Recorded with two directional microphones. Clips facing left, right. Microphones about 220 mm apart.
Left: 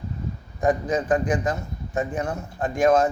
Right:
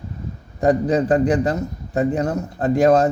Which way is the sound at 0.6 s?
35° right (ahead or behind).